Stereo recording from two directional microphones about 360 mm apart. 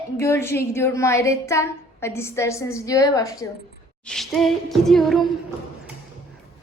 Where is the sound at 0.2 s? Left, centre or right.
Centre.